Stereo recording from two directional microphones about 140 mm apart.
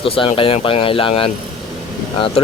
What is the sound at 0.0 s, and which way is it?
Speech, 40° left (ahead or behind).